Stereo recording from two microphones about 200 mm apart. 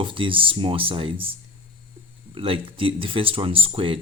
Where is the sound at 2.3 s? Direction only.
25° right (ahead or behind).